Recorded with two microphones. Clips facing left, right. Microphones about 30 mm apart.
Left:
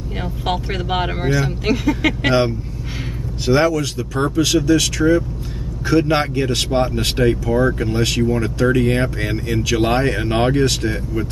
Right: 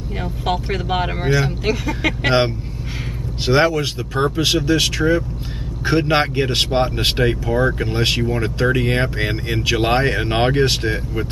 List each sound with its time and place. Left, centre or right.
0.7 s speech: centre
1.2 s speech: centre
1.6 s speech: centre
3.4 s speech: right